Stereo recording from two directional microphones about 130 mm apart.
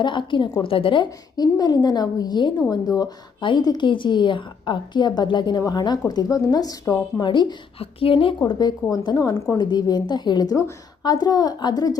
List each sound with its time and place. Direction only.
0.0 s a woman's voice: 40° left (ahead or behind)
8.4 s a woman's voice: 30° left (ahead or behind)